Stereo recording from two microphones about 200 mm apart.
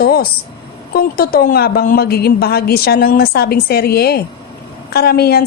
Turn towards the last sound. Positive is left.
turn(degrees=50)  # may be behind; listen again after turning